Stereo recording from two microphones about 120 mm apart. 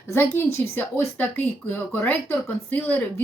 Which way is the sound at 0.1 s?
20° left (ahead or behind).